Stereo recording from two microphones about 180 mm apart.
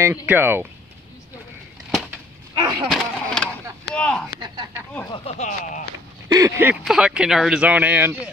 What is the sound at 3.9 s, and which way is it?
Speech, 5° left (ahead or behind).